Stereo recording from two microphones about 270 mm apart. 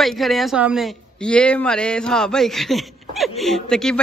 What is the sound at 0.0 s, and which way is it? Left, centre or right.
A man's voice, centre.